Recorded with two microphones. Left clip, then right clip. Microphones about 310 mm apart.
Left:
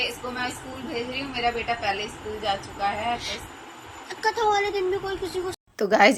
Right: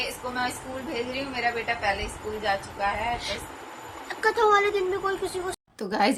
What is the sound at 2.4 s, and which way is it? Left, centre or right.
A woman's voice, centre.